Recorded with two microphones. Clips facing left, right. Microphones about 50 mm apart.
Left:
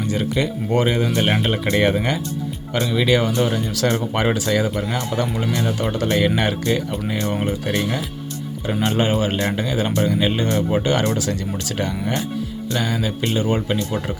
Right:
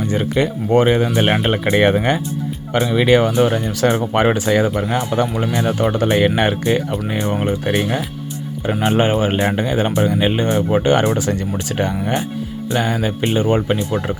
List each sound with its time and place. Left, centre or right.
0.1 s speech: right